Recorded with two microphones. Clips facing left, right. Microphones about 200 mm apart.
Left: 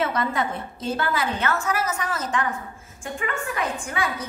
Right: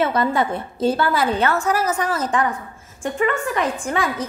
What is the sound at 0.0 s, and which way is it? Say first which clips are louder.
A woman's voice: right 5 dB; 30° right (ahead or behind).